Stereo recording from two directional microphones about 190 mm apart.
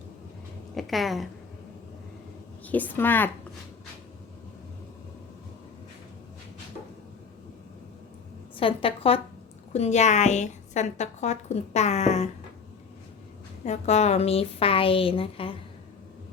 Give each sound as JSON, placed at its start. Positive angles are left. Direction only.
{"t": 0.8, "sound": "speech", "side_deg": 0}
{"t": 2.6, "sound": "speech", "side_deg": 10}
{"t": 8.5, "sound": "a woman's voice", "side_deg": 30}
{"t": 13.7, "sound": "a woman's voice", "side_deg": 35}